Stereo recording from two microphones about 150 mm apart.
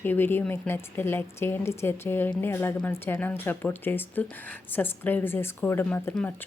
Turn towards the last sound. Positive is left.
turn(degrees=10)  # may be behind; listen again after turning